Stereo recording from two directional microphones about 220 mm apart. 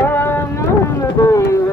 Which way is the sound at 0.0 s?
10° left (ahead or behind).